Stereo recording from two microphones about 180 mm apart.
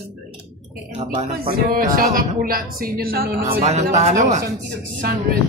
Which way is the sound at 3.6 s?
35° right (ahead or behind).